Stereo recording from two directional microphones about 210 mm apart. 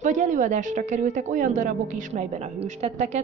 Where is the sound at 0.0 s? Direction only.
35° right (ahead or behind).